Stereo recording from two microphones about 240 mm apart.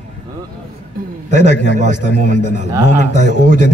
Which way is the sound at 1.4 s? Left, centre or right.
Left.